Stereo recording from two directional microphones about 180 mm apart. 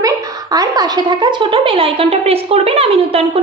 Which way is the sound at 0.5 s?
20° right (ahead or behind).